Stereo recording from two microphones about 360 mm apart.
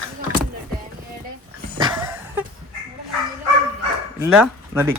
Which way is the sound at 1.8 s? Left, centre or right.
Centre.